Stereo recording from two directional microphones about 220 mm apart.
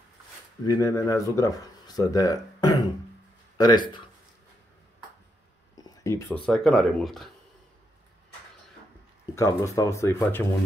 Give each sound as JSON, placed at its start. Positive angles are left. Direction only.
{"t": 0.7, "sound": "speech", "side_deg": 15}
{"t": 5.8, "sound": "speech", "side_deg": 15}
{"t": 9.3, "sound": "speech", "side_deg": 15}